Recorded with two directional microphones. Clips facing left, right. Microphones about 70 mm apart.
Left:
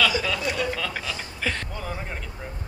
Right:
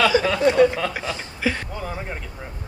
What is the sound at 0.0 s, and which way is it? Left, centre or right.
Speech, right.